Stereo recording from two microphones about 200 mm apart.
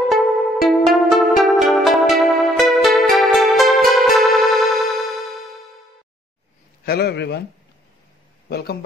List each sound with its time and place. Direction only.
0.1 s music: centre (ahead or behind)
6.9 s speech: 55° left (ahead or behind)
8.5 s a man's voice: 55° left (ahead or behind)